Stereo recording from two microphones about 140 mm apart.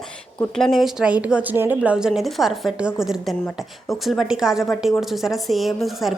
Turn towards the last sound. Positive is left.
turn(degrees=0)  # may be behind; listen again after turning